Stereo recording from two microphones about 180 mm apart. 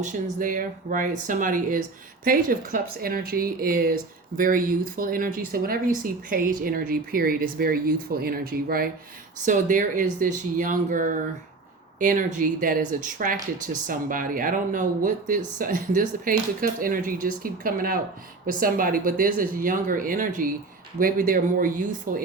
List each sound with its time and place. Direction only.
0.0 s speech: 45° right (ahead or behind)